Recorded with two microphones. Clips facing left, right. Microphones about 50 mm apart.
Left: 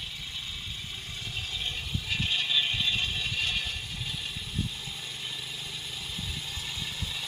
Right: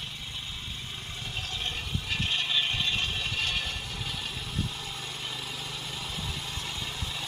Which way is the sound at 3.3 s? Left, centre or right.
Right.